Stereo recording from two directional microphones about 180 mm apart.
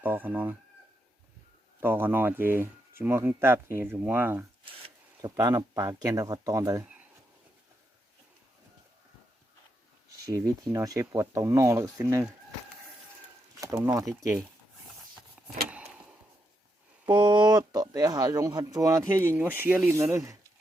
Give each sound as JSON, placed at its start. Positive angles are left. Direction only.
{"t": 0.0, "sound": "speech", "side_deg": -10}
{"t": 1.8, "sound": "speech", "side_deg": -10}
{"t": 4.6, "sound": "speech", "side_deg": -25}
{"t": 10.3, "sound": "speech", "side_deg": -20}
{"t": 13.6, "sound": "speech", "side_deg": -15}
{"t": 15.4, "sound": "vehicle", "side_deg": 0}
{"t": 17.1, "sound": "speech", "side_deg": -25}